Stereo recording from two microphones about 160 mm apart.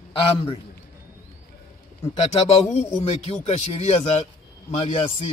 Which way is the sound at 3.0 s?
40° left (ahead or behind).